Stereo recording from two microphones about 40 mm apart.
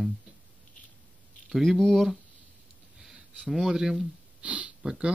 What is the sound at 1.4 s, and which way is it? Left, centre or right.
Speech, centre.